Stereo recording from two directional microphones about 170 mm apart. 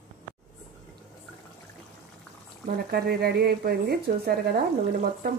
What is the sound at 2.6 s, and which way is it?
Speech, 65° right (ahead or behind).